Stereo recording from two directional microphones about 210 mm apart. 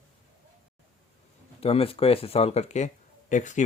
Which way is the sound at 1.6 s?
25° left (ahead or behind).